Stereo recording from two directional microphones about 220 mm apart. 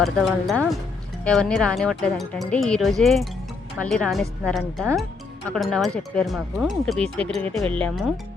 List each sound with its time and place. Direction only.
0.0 s speech: centre (ahead or behind)